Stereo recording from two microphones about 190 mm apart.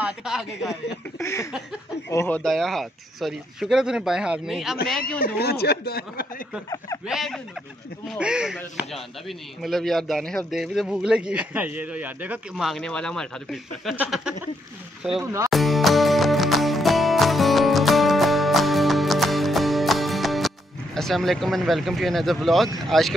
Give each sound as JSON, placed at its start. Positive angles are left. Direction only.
{"t": 0.0, "sound": "a sound", "side_deg": 0}
{"t": 1.2, "sound": "a sound", "side_deg": 15}
{"t": 2.0, "sound": "a man's voice", "side_deg": 10}
{"t": 5.2, "sound": "speech", "side_deg": 55}
{"t": 7.1, "sound": "a man's voice", "side_deg": 0}
{"t": 9.6, "sound": "a man's voice", "side_deg": 0}
{"t": 15.5, "sound": "music", "side_deg": 0}
{"t": 22.8, "sound": "a man's voice", "side_deg": 0}